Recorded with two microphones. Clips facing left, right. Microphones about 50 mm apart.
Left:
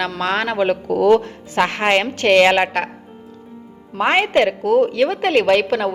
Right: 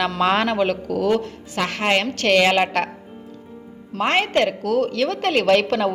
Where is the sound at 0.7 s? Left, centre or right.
Left; by 2.9 s centre.